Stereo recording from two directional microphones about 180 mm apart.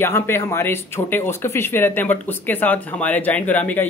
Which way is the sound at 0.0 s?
15° left (ahead or behind).